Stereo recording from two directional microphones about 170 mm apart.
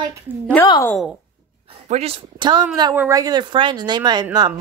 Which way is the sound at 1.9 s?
35° right (ahead or behind).